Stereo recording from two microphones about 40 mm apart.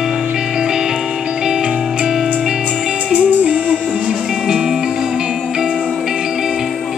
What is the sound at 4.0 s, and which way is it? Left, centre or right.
Music, centre.